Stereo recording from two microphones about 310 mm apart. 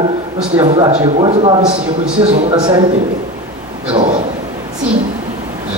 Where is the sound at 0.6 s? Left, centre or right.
Centre.